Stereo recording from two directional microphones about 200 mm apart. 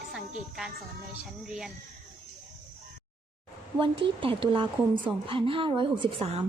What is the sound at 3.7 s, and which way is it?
A woman's voice, 25° right (ahead or behind).